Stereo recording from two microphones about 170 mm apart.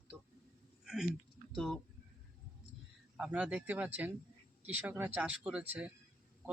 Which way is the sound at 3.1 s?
5° right (ahead or behind).